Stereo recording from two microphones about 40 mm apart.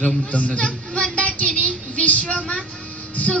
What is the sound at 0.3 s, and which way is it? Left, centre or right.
Speech, left.